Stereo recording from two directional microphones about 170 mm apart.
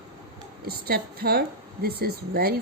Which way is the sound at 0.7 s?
65° right (ahead or behind).